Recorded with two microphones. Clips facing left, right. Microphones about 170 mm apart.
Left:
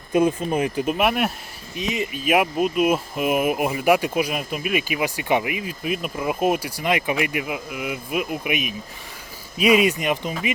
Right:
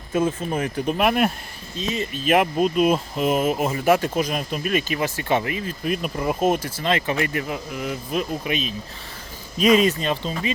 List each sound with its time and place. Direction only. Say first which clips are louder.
0.1 s speech: left 3 dB; 15° left (ahead or behind)
0.9 s speech: right 4 dB; 5° left (ahead or behind)
1.7 s speech: left 1 dB; 15° left (ahead or behind)